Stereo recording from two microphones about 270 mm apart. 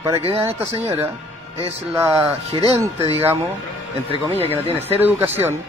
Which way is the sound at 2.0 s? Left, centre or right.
Centre.